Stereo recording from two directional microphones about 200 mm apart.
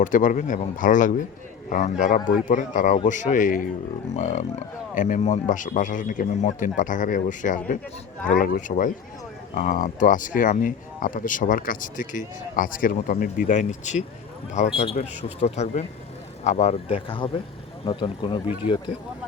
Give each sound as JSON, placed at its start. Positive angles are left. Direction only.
{"t": 0.0, "sound": "speech", "side_deg": 40}